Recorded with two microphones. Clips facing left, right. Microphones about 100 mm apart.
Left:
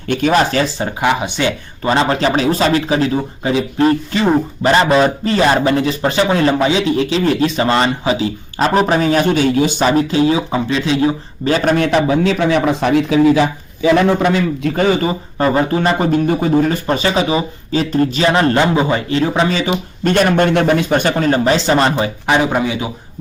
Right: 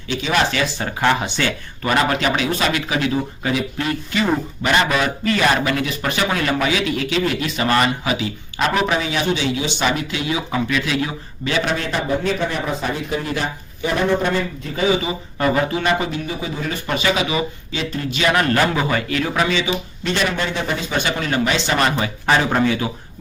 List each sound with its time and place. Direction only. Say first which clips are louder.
0.1 s speech: left 8 dB; 50° left (ahead or behind)
0.3 s speech: left 3 dB; 35° left (ahead or behind)
1.0 s speech: left 3 dB; 20° left (ahead or behind); by 11.9 s 45° left (ahead or behind)
11.9 s a man's voice: left 7 dB; 85° left; by 14.8 s 70° left (ahead or behind)
15.4 s speech: left 4 dB; 35° left (ahead or behind)
19.5 s speech: left 3 dB; 40° left (ahead or behind)
19.7 s speech: left 8 dB; 55° left (ahead or behind); by 22.1 s 30° left (ahead or behind)
22.3 s speech: left 1 dB; 15° left (ahead or behind)